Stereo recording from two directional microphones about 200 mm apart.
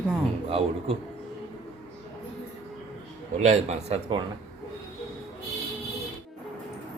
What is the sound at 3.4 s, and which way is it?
Speech, 35° right (ahead or behind).